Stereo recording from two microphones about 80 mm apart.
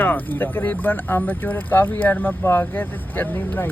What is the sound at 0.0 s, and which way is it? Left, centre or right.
Speech, left.